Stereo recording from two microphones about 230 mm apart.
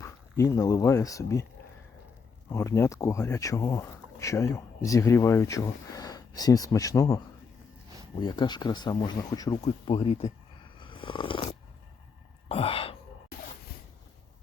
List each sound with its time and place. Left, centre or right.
0.0 s speech: centre
2.5 s speech: centre
8.2 s speech: centre
10.8 s a sound: left